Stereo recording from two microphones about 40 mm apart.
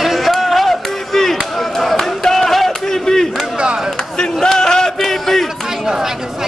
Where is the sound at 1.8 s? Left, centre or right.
Centre.